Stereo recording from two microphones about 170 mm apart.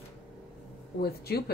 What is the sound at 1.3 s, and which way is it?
Speech, 65° left (ahead or behind).